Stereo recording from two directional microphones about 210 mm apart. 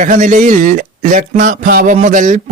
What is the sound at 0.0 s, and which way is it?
A man's voice, 35° right (ahead or behind).